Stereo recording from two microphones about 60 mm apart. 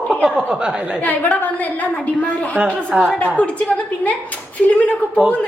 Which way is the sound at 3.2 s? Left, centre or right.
Left.